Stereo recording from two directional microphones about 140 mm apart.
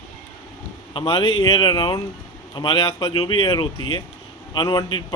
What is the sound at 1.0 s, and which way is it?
Speech, 40° left (ahead or behind).